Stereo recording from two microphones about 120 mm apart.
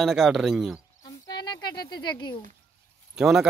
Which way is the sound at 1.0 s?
35° left (ahead or behind).